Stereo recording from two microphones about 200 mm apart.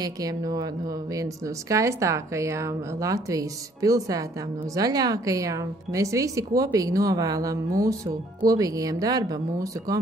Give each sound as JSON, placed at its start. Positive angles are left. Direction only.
{"t": 0.0, "sound": "a woman's voice", "side_deg": -20}